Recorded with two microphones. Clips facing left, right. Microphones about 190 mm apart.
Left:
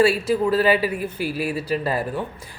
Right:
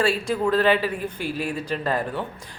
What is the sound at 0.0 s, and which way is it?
Speech, 5° left (ahead or behind).